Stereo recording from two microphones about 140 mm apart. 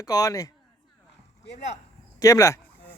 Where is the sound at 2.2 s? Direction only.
25° left (ahead or behind).